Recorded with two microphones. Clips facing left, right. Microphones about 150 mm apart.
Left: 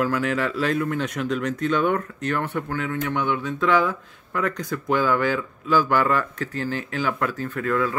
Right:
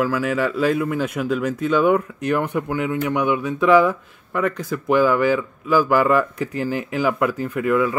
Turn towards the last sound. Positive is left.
turn(degrees=-10)  # may be behind; listen again after turning